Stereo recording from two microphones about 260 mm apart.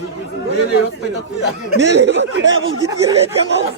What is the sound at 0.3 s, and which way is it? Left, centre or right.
Speech, left.